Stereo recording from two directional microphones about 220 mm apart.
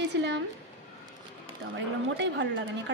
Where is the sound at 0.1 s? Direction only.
50° right (ahead or behind).